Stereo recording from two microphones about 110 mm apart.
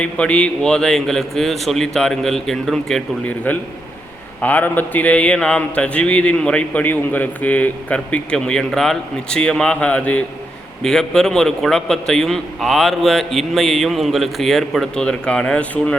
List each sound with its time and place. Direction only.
0.0 s a man's voice: 10° left (ahead or behind)
3.2 s a man's voice: 15° left (ahead or behind)